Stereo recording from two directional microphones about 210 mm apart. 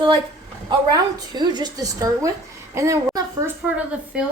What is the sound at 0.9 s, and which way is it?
A woman's voice, 20° right (ahead or behind).